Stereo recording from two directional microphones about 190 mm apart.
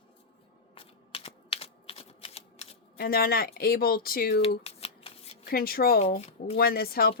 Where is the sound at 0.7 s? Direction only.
30° left (ahead or behind).